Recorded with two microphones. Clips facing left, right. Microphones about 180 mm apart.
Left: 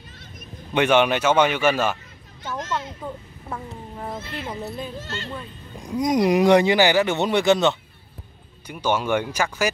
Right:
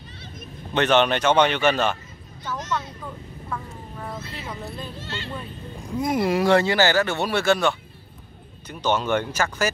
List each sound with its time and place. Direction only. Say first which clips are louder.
0.7 s speech: left 1 dB; 10° left (ahead or behind)
3.4 s speech: left 1 dB; 25° left (ahead or behind)
4.6 s speech: left 3 dB; 15° left (ahead or behind)
5.0 s speech: left 1 dB; 45° left (ahead or behind)
5.8 s speech: left 3 dB; 15° left (ahead or behind)